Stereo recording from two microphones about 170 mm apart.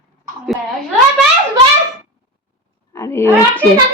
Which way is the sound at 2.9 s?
15° left (ahead or behind).